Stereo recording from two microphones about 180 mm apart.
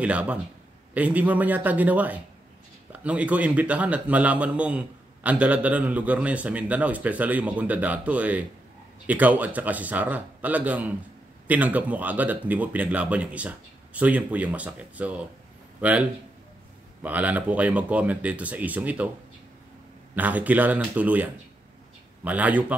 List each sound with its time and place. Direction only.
0.0 s a man's voice: 5° right (ahead or behind)
20.2 s a man's voice: 10° right (ahead or behind)